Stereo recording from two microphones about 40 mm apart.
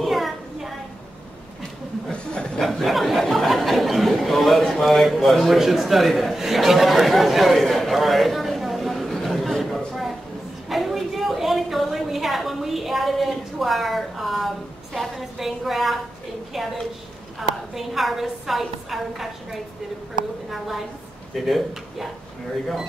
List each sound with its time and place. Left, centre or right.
0.0 s a sound: centre
2.1 s chuckle: left
2.6 s a sound: centre
15.1 s a woman's voice: centre
17.4 s a woman's voice: centre
20.5 s a woman's voice: centre